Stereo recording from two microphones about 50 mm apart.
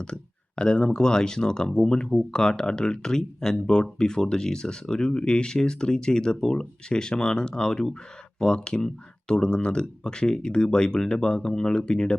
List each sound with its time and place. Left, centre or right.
0.0 s speech: centre